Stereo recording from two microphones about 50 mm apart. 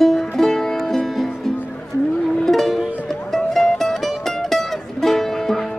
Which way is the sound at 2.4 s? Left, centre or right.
Centre.